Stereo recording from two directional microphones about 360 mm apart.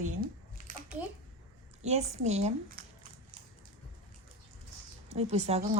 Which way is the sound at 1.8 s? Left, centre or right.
Centre.